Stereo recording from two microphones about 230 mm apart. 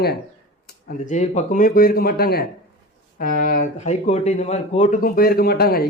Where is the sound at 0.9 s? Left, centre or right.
Left.